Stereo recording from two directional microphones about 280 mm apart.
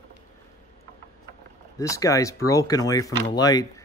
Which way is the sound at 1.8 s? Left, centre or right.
Centre.